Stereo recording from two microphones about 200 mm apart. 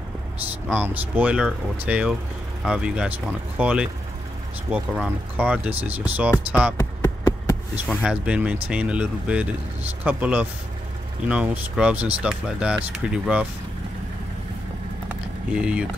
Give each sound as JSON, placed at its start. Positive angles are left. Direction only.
{"t": 0.7, "sound": "speech", "side_deg": -10}
{"t": 6.8, "sound": "a sound", "side_deg": 15}
{"t": 7.7, "sound": "speech", "side_deg": -5}
{"t": 15.5, "sound": "speech", "side_deg": -5}